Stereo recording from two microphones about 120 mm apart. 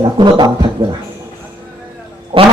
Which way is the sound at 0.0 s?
40° right (ahead or behind).